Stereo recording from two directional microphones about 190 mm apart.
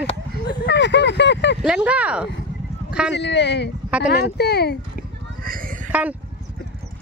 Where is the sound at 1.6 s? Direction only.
5° right (ahead or behind).